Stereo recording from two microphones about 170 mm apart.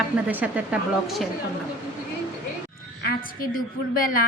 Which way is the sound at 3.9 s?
55° left (ahead or behind).